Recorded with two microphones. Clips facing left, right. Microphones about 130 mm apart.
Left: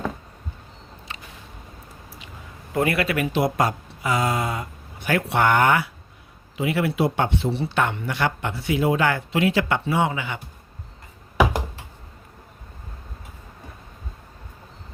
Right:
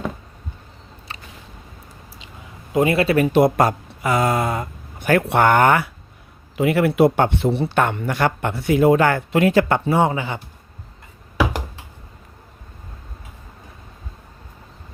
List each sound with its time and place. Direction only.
2.7 s a man's voice: 25° right (ahead or behind)
3.3 s a man's voice: 50° right (ahead or behind); by 10.4 s 35° right (ahead or behind)